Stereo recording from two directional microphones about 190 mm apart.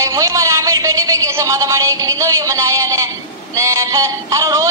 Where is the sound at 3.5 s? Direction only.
15° right (ahead or behind).